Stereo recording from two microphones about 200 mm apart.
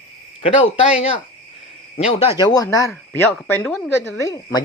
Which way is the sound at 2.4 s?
15° left (ahead or behind).